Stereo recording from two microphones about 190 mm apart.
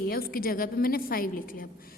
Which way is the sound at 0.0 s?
50° left (ahead or behind).